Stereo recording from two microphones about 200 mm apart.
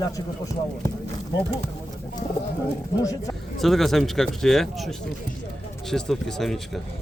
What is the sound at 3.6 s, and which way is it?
Speech, centre (ahead or behind).